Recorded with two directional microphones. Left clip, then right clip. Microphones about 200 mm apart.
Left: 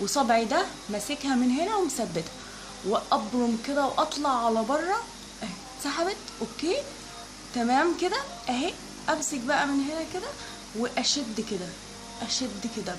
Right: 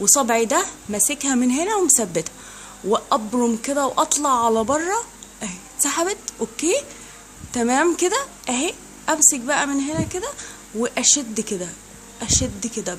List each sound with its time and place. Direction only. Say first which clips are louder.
0.0 s a woman's voice: right 6 dB; 55° right (ahead or behind)
5.4 s a sound: right 9 dB; 55° right (ahead or behind)
6.6 s a woman's voice: right 7 dB; 55° right (ahead or behind)